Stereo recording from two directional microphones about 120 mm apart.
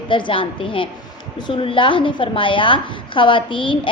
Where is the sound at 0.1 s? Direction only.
45° left (ahead or behind).